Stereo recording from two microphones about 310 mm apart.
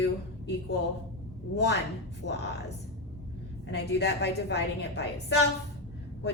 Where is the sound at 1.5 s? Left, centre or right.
Left.